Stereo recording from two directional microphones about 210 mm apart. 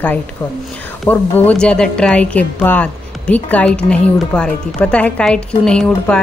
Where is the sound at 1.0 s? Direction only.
10° left (ahead or behind).